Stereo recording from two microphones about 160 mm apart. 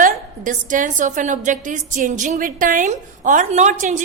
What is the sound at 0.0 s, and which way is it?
A woman's voice, 55° right (ahead or behind).